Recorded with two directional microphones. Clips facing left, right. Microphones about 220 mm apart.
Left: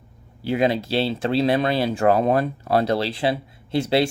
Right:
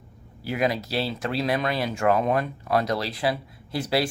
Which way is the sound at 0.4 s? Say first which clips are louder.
Left 5 dB; 25° left (ahead or behind).